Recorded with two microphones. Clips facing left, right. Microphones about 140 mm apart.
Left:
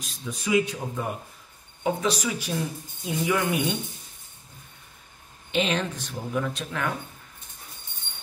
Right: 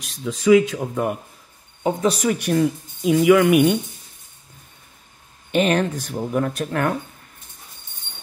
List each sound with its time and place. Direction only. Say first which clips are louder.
0.0 s speech: right 11 dB; 80° right
1.8 s speech: right 4 dB; 35° right (ahead or behind)
2.0 s speech: right 7 dB; 60° right (ahead or behind)
5.5 s speech: right 7 dB; 50° right (ahead or behind)